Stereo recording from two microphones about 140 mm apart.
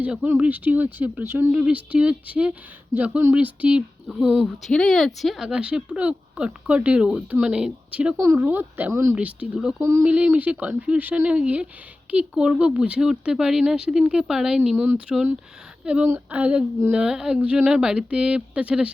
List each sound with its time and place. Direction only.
0.0 s speech: 10° right (ahead or behind)
8.1 s speech: 20° right (ahead or behind)
9.1 s speech: 10° right (ahead or behind)
9.8 s speech: 20° right (ahead or behind)
10.1 s speech: 10° right (ahead or behind)